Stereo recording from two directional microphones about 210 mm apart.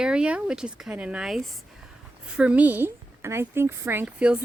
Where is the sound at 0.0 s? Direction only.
5° right (ahead or behind).